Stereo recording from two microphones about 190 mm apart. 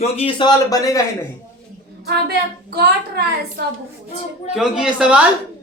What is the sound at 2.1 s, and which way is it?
Speech, 55° right (ahead or behind).